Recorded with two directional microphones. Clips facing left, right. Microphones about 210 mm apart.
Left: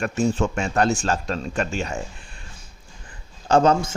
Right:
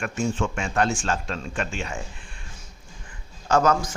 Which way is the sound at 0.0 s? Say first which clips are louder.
Left 4 dB; 35° left (ahead or behind).